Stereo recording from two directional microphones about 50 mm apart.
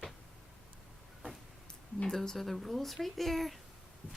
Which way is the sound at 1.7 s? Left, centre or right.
Centre.